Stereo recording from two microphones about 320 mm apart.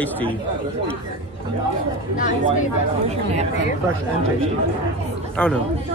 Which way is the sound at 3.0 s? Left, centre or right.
Centre.